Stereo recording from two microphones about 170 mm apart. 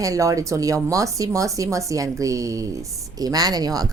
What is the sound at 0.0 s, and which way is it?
Speech, 20° right (ahead or behind).